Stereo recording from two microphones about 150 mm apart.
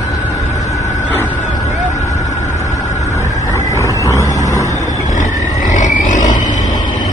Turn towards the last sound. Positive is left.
turn(degrees=55)  # may be behind; listen again after turning